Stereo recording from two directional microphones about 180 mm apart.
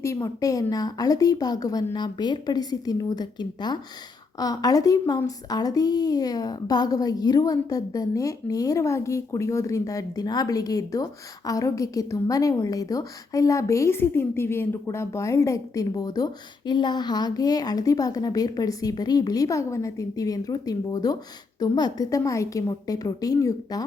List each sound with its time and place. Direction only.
0.0 s a woman's voice: 15° left (ahead or behind)